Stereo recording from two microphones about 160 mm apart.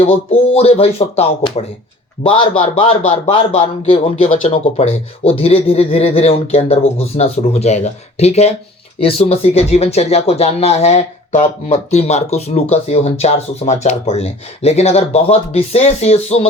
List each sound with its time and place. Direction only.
0.5 s speech: 40° left (ahead or behind)